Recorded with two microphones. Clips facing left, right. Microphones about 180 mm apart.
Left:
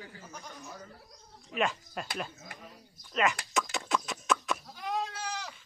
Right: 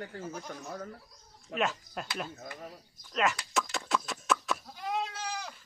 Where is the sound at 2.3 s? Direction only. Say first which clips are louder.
Right 6 dB; 40° right (ahead or behind).